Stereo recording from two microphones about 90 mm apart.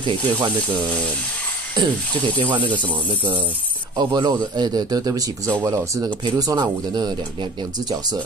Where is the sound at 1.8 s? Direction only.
55° right (ahead or behind).